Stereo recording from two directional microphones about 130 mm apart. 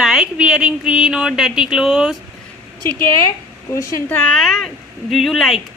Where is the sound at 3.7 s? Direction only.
20° left (ahead or behind).